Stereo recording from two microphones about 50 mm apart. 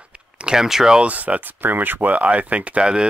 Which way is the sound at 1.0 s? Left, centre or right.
Right.